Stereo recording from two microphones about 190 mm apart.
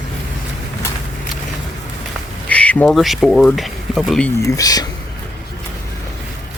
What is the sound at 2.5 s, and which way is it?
Speech, 5° left (ahead or behind).